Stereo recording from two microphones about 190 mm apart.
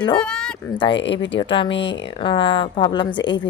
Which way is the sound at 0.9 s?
70° left (ahead or behind).